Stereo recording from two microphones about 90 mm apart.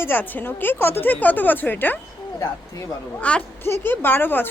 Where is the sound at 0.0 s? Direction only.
20° left (ahead or behind).